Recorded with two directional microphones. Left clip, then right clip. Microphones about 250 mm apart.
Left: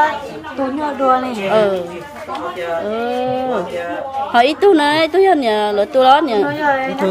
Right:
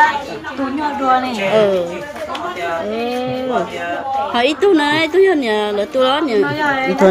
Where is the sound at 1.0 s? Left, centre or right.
Centre.